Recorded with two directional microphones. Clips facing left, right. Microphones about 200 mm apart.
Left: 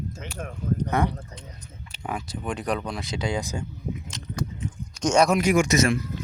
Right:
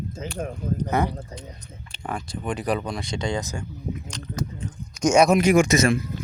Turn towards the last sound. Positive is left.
turn(degrees=-25)  # may be behind; listen again after turning